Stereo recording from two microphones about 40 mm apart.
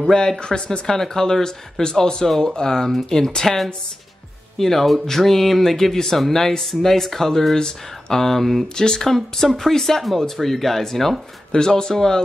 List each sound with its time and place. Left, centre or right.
0.1 s speech: centre